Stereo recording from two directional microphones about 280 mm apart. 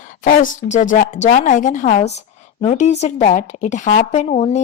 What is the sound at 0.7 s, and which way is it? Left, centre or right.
Speech, left.